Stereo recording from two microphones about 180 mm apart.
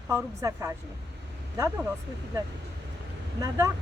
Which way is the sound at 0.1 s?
15° right (ahead or behind).